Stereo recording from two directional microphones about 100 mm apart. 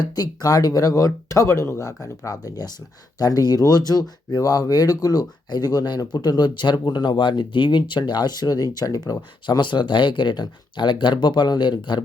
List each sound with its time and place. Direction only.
0.0 s speech: 40° left (ahead or behind)